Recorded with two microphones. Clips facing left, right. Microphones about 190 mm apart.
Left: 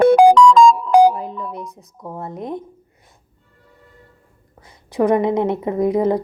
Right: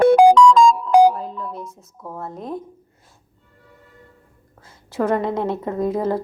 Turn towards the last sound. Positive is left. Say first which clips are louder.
# left 4 dB
turn(degrees=15)  # may be behind; listen again after turning